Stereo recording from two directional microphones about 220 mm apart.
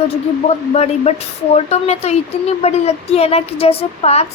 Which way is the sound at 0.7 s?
30° left (ahead or behind).